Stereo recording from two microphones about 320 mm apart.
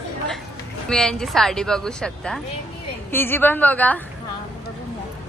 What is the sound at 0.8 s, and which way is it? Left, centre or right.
Speech, centre.